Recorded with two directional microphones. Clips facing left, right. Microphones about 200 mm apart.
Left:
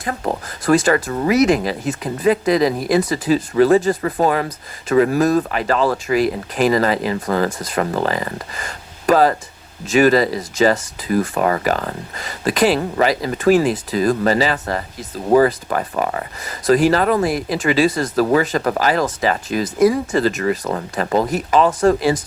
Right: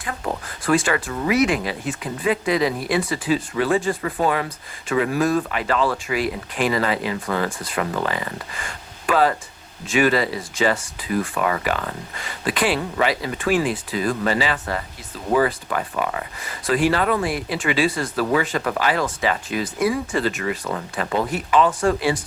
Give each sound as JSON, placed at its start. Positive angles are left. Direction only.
{"t": 0.0, "sound": "speech", "side_deg": 40}